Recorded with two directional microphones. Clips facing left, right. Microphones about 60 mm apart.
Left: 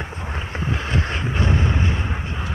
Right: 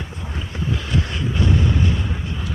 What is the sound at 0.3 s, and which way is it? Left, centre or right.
Vehicle, left.